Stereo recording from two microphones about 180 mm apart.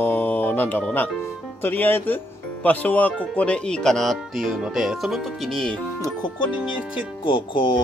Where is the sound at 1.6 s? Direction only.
10° left (ahead or behind).